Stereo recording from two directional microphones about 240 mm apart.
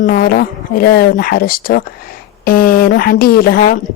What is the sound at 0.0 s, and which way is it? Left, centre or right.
Speech, left.